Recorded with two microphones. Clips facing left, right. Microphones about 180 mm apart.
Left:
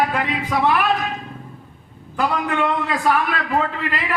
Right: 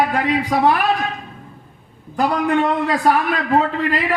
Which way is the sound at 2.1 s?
40° right (ahead or behind).